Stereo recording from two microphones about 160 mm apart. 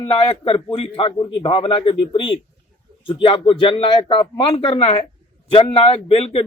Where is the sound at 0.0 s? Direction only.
35° left (ahead or behind).